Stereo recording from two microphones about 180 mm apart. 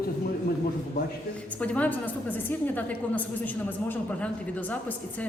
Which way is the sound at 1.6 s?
10° left (ahead or behind).